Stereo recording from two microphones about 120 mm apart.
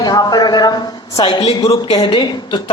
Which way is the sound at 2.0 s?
40° left (ahead or behind).